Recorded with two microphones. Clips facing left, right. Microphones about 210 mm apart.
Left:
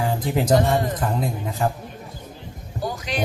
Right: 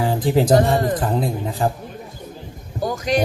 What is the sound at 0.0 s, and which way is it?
Music, 30° right (ahead or behind).